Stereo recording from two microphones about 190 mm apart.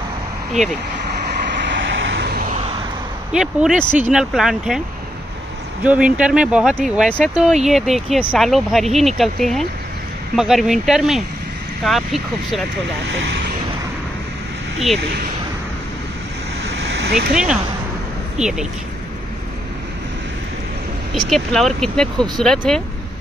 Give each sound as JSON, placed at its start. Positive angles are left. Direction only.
{"t": 1.3, "sound": "vehicle", "side_deg": -70}
{"t": 3.3, "sound": "speech", "side_deg": -5}
{"t": 5.9, "sound": "speech", "side_deg": -5}
{"t": 13.0, "sound": "speech", "side_deg": -75}
{"t": 16.9, "sound": "speech", "side_deg": -60}
{"t": 18.4, "sound": "speech", "side_deg": -5}
{"t": 21.3, "sound": "speech", "side_deg": 0}